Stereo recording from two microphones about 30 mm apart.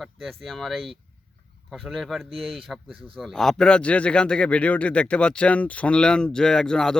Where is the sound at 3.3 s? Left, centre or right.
Centre.